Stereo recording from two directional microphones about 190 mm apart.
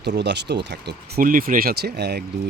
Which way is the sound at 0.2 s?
60° right (ahead or behind).